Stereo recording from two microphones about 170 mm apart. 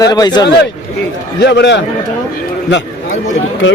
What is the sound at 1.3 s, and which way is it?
Speech, 90° left.